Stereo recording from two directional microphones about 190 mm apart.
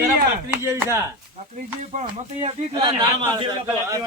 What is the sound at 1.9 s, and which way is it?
Speech, 35° right (ahead or behind).